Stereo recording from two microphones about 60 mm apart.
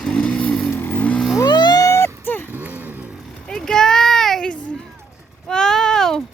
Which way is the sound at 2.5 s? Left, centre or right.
Right.